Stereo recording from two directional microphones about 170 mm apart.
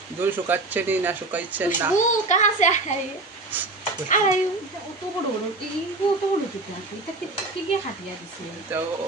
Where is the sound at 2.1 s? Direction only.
45° left (ahead or behind).